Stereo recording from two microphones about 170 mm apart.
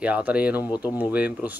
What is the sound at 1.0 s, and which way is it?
Speech, 10° right (ahead or behind).